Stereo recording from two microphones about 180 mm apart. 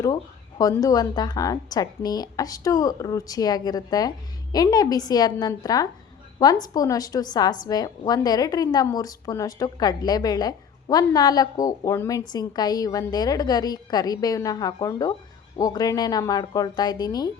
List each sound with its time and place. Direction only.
0.6 s a woman's voice: 20° left (ahead or behind)